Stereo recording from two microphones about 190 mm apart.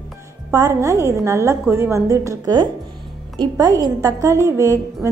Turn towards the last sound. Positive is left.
turn(degrees=-15)  # may be behind; listen again after turning